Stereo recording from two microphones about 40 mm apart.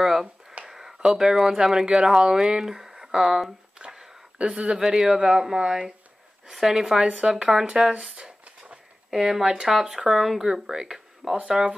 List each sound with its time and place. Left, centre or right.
0.0 s a sound: centre
0.7 s speech: centre
4.4 s speech: right
6.5 s speech: centre
9.1 s speech: centre
11.4 s speech: right